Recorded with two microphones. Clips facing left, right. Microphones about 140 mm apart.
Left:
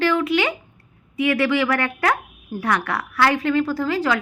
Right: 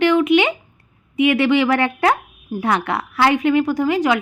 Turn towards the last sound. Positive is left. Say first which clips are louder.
# right 4 dB
turn(degrees=-20)  # may be behind; listen again after turning